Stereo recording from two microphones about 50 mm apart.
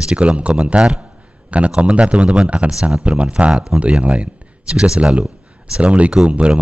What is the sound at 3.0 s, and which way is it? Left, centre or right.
A man's voice, right.